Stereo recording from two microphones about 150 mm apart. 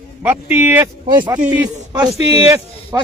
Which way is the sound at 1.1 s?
30° right (ahead or behind).